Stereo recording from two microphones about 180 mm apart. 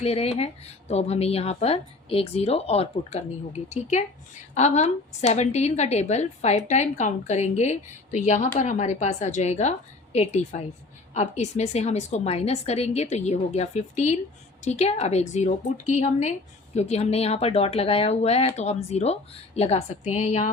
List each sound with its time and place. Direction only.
0.0 s a woman's voice: 35° left (ahead or behind)
4.5 s a woman's voice: 40° left (ahead or behind)
16.7 s a woman's voice: 35° left (ahead or behind)